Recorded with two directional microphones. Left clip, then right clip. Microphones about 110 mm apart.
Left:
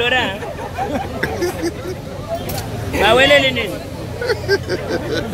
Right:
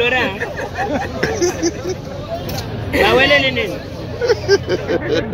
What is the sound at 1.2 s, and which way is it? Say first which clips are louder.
Speech: right 4 dB; 25° right (ahead or behind).